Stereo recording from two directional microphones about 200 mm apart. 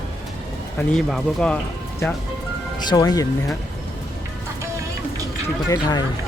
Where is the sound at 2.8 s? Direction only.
20° left (ahead or behind).